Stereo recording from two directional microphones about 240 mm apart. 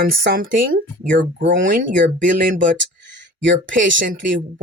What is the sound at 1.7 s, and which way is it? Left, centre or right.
Speech, right.